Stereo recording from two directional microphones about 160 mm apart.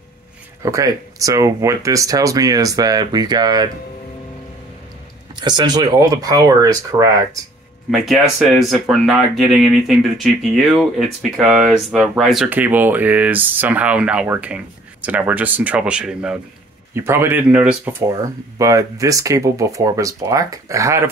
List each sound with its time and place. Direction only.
0.6 s speech: 20° right (ahead or behind)
5.3 s speech: 25° right (ahead or behind)
7.9 s speech: centre (ahead or behind)
16.9 s speech: 15° right (ahead or behind)
18.1 s speech: 20° right (ahead or behind)